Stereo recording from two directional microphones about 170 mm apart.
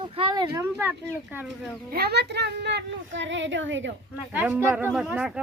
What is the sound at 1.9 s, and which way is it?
Speech, 70° right (ahead or behind).